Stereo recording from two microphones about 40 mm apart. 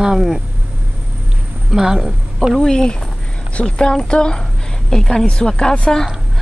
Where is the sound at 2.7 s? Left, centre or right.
Centre.